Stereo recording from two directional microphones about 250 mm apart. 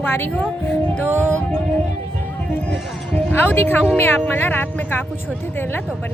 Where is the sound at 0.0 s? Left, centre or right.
Centre.